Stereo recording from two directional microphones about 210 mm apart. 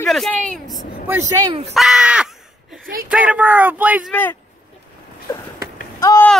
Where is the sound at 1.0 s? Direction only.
15° right (ahead or behind).